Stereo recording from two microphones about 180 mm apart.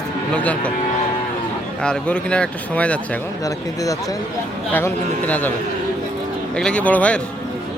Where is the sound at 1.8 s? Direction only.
5° left (ahead or behind).